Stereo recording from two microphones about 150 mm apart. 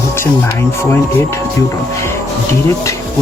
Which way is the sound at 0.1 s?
15° left (ahead or behind).